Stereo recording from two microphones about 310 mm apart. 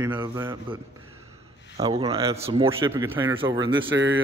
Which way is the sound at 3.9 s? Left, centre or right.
Right.